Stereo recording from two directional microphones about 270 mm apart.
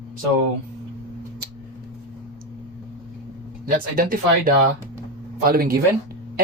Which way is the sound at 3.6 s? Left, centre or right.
Right.